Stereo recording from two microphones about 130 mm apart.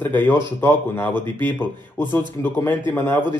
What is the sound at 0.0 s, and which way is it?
A man's voice, 15° left (ahead or behind).